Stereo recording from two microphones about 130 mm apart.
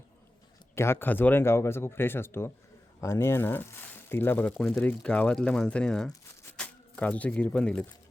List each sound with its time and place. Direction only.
0.8 s speech: 15° left (ahead or behind)
4.5 s speech: centre (ahead or behind)